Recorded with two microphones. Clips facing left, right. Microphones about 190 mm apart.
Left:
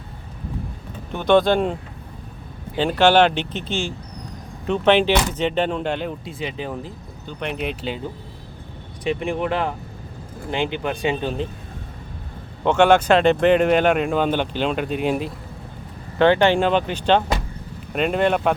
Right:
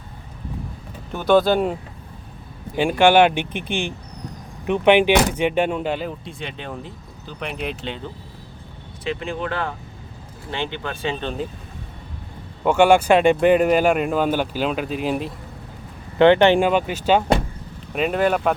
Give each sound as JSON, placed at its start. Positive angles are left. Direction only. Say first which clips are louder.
{"t": 1.1, "sound": "speech", "louder": "even", "side_deg": -5}
{"t": 2.7, "sound": "speech", "louder": "right 1 dB", "side_deg": -10}
{"t": 9.0, "sound": "speech", "louder": "left 3 dB", "side_deg": 15}
{"t": 12.6, "sound": "speech", "louder": "right 1 dB", "side_deg": -10}
{"t": 16.1, "sound": "speech", "louder": "right 3 dB", "side_deg": -20}